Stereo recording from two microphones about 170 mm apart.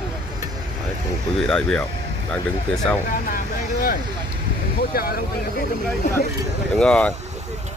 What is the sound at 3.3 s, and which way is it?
Speech, 60° left (ahead or behind).